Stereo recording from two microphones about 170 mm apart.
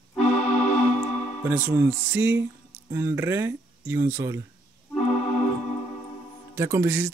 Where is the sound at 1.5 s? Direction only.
10° right (ahead or behind).